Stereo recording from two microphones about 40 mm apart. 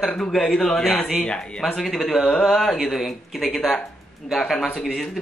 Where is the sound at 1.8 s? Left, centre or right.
Centre.